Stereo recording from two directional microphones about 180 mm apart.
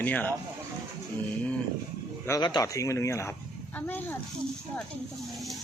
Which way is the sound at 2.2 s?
20° left (ahead or behind).